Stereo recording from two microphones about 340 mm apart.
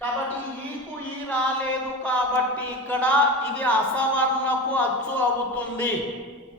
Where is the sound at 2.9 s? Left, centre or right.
Centre.